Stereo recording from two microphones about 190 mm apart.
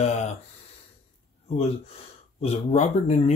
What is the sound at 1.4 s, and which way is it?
Speech, 35° left (ahead or behind).